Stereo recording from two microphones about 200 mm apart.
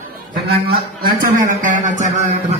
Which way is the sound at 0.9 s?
45° right (ahead or behind).